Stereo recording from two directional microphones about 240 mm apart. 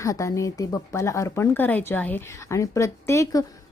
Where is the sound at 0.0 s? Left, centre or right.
Centre.